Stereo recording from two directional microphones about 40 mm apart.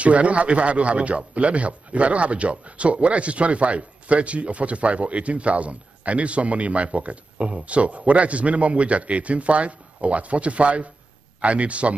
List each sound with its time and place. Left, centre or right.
0.0 s a man's voice: right